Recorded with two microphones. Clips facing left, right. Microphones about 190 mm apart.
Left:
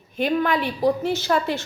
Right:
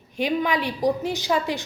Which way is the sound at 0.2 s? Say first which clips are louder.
Left 2 dB; 15° right (ahead or behind).